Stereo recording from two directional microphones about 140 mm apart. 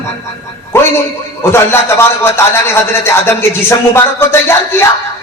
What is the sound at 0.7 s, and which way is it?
A man's voice, 20° left (ahead or behind).